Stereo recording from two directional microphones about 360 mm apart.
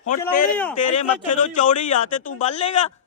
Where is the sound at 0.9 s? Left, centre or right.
Centre.